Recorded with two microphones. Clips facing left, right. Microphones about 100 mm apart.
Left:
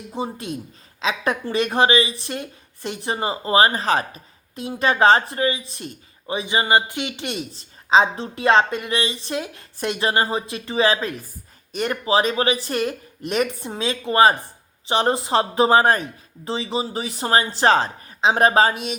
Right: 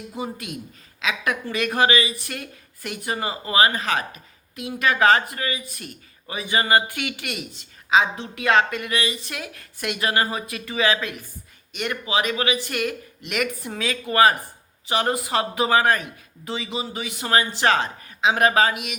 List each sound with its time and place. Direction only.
0.1 s a woman's voice: 30° left (ahead or behind)